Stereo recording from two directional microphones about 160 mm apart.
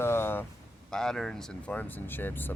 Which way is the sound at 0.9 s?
5° left (ahead or behind).